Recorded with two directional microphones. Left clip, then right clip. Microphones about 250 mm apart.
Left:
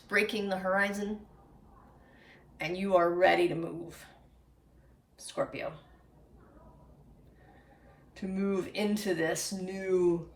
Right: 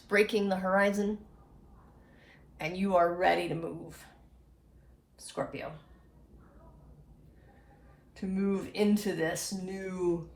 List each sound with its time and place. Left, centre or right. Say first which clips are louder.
0.1 s speech: right 2 dB; centre
2.2 s speech: left 1 dB; centre
5.2 s speech: left 2 dB; centre
8.1 s speech: left 1 dB; centre